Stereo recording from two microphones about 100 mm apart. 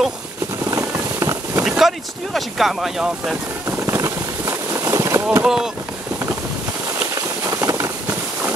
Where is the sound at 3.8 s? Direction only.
30° right (ahead or behind).